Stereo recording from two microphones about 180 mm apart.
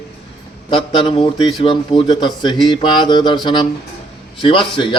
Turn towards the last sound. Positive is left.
turn(degrees=25)  # may be behind; listen again after turning